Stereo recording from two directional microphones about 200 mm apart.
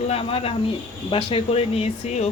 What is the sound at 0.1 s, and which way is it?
Speech, 25° left (ahead or behind).